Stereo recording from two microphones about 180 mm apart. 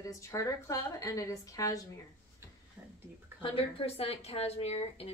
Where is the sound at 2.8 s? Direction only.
10° right (ahead or behind).